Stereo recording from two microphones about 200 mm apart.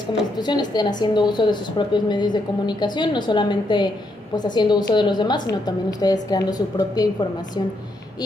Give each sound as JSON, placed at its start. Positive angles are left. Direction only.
{"t": 0.4, "sound": "a woman's voice", "side_deg": 20}